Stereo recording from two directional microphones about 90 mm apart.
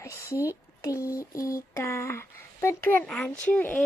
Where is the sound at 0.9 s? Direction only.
20° right (ahead or behind).